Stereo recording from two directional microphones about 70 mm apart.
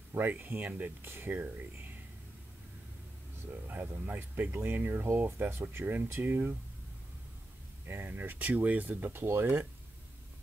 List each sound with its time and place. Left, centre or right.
0.2 s speech: right
3.6 s speech: right
7.8 s speech: right
9.2 s speech: right